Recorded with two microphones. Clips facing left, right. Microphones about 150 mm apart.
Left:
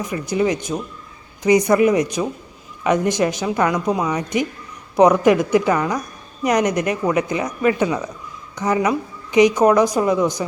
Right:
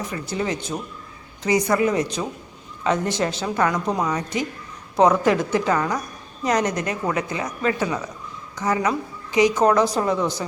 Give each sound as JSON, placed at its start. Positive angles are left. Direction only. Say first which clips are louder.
{"t": 0.1, "sound": "a woman's voice", "louder": "left 9 dB", "side_deg": 15}